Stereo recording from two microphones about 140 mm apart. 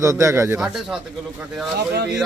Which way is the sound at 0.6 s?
5° right (ahead or behind).